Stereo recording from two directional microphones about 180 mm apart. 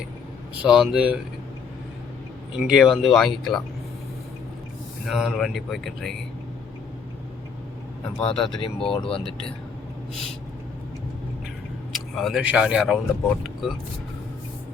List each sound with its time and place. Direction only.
0.6 s speech: 5° right (ahead or behind)
2.6 s speech: centre (ahead or behind)
5.0 s speech: centre (ahead or behind)
8.2 s speech: 30° left (ahead or behind)
11.9 s speech: centre (ahead or behind)